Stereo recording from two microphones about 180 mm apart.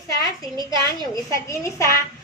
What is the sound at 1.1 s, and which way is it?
Speech, 15° left (ahead or behind).